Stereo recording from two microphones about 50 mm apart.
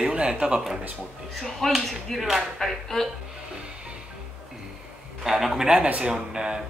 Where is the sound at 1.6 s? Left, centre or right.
Centre.